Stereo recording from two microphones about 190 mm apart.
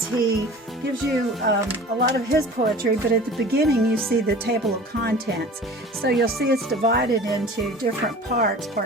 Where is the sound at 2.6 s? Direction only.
50° right (ahead or behind).